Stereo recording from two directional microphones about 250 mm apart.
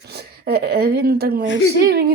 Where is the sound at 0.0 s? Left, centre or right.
Right.